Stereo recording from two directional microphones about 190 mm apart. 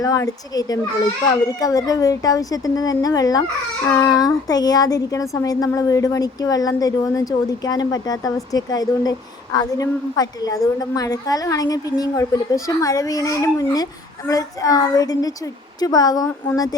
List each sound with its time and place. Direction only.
0.0 s speech: 20° left (ahead or behind)